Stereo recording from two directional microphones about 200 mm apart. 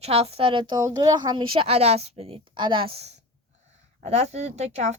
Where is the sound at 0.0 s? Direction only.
30° right (ahead or behind).